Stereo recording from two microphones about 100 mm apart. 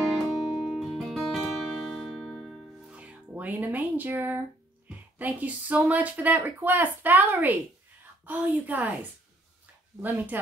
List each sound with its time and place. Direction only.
0.1 s music: centre (ahead or behind)
2.9 s speech: 15° right (ahead or behind)
10.0 s speech: 20° right (ahead or behind)